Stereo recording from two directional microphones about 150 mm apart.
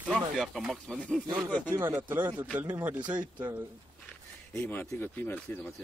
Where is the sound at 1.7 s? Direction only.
20° right (ahead or behind).